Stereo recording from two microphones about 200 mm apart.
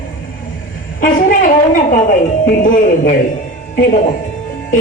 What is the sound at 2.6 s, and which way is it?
Speech, 40° left (ahead or behind).